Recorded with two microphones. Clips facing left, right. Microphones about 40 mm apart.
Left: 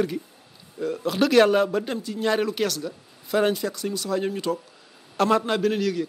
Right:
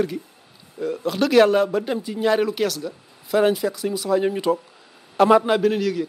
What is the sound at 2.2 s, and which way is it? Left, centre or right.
A man's voice, centre.